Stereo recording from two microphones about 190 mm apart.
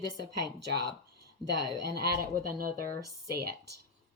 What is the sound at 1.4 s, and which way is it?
Speech, 55° right (ahead or behind).